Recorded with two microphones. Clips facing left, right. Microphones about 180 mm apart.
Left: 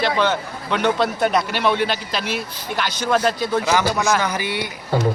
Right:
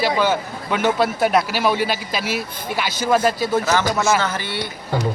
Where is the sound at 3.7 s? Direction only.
15° left (ahead or behind).